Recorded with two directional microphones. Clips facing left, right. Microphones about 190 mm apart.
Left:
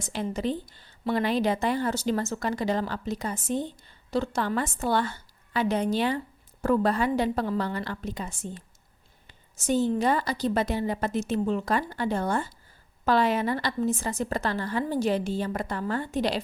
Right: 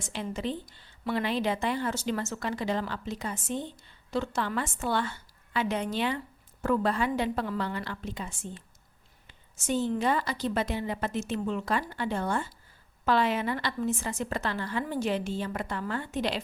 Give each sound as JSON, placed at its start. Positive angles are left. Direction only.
{"t": 0.0, "sound": "a woman's voice", "side_deg": 40}